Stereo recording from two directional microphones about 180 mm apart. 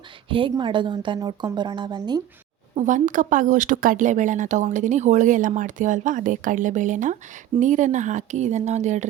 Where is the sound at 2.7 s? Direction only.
45° right (ahead or behind).